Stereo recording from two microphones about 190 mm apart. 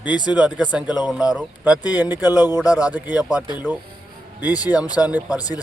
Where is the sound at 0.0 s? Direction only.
25° left (ahead or behind).